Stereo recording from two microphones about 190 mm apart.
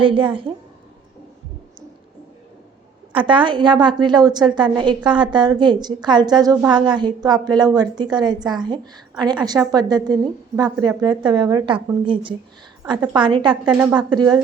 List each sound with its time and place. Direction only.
0.0 s a woman's voice: 25° right (ahead or behind)
3.2 s a woman's voice: 25° right (ahead or behind)